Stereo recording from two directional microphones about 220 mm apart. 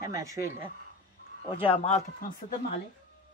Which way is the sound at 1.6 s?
25° left (ahead or behind).